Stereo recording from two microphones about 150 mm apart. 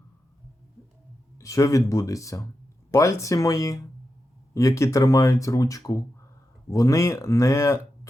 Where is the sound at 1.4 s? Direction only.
20° left (ahead or behind).